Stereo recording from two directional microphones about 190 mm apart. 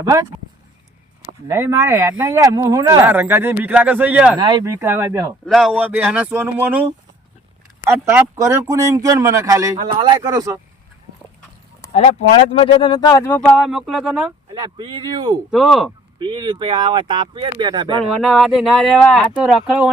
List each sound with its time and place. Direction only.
0.0 s speech: 20° right (ahead or behind)
1.5 s speech: 15° right (ahead or behind)
4.4 s speech: 20° right (ahead or behind)
5.5 s speech: centre (ahead or behind)
7.9 s speech: 15° right (ahead or behind)
11.9 s speech: 35° left (ahead or behind); by 13.6 s 10° left (ahead or behind)
13.6 s speech: centre (ahead or behind)
14.5 s speech: 25° right (ahead or behind)
15.5 s speech: centre (ahead or behind)
16.1 s speech: 25° right (ahead or behind)
18.1 s speech: centre (ahead or behind)